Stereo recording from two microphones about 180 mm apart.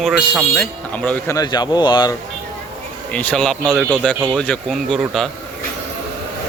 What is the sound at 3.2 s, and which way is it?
Speech, 5° left (ahead or behind).